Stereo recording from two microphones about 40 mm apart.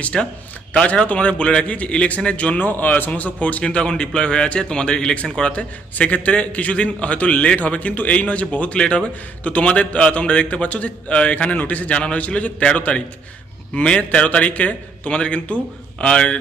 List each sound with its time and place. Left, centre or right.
0.0 s a man's voice: left
2.6 s a man's voice: left
3.6 s a man's voice: left
8.8 s a man's voice: left
9.4 s a man's voice: left
11.5 s a man's voice: left
14.1 s a man's voice: left